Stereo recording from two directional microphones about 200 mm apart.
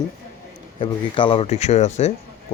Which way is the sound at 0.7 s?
25° left (ahead or behind).